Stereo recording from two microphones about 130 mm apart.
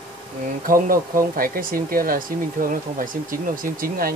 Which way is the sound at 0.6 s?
90° right.